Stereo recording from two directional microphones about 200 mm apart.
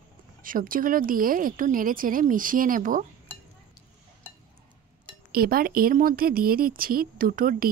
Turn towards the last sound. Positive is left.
turn(degrees=-45)  # may be behind; listen again after turning